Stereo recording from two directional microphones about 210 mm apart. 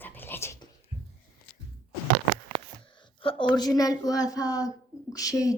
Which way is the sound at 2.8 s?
25° left (ahead or behind).